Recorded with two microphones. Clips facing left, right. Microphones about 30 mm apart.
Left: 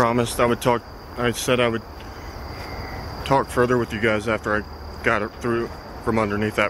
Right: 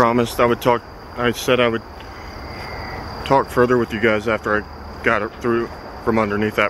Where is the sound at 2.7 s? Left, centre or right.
Right.